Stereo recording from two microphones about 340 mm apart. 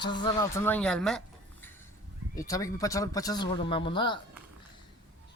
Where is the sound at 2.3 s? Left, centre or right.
Centre.